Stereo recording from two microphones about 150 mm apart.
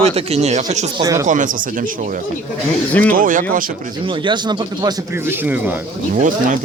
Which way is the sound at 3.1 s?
65° right (ahead or behind).